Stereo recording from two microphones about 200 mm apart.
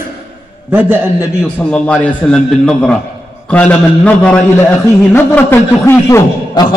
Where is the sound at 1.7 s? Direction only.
5° left (ahead or behind).